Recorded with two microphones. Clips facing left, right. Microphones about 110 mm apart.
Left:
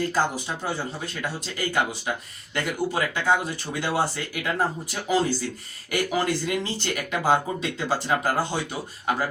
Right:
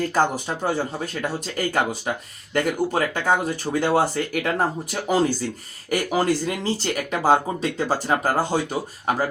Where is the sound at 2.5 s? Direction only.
45° right (ahead or behind).